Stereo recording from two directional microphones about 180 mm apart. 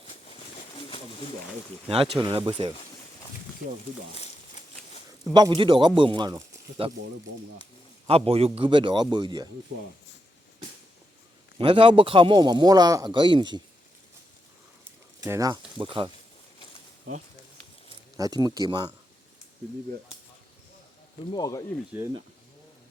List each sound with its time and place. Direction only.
0.7 s a sound: 30° left (ahead or behind)
1.9 s speech: 30° right (ahead or behind)
4.1 s a sound: 35° left (ahead or behind)
5.3 s a man's voice: 25° right (ahead or behind)
8.0 s a man's voice: 35° right (ahead or behind)
11.5 s a man's voice: 30° right (ahead or behind)
15.2 s a man's voice: 20° right (ahead or behind)
18.2 s a man's voice: 20° right (ahead or behind)
21.2 s speech: 20° left (ahead or behind)
21.9 s speech: 10° right (ahead or behind)